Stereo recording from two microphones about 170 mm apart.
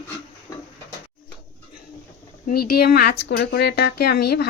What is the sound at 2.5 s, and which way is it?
Speech, 65° left (ahead or behind).